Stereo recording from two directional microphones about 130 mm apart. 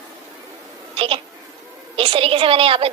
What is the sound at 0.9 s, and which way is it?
A woman's voice, 45° right (ahead or behind).